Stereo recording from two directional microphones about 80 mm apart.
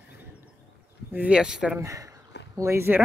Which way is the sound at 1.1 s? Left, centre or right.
Centre.